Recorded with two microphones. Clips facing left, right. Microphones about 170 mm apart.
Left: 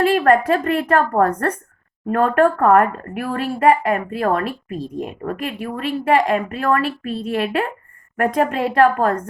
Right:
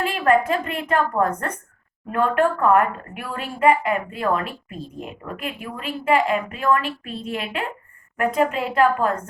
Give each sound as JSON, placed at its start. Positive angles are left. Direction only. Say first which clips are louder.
{"t": 0.0, "sound": "a woman's voice", "louder": "left 4 dB", "side_deg": 40}